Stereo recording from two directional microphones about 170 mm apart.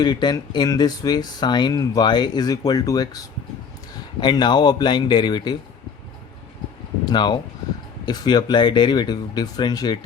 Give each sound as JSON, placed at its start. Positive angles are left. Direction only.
{"t": 0.0, "sound": "speech", "side_deg": 25}
{"t": 7.0, "sound": "speech", "side_deg": 25}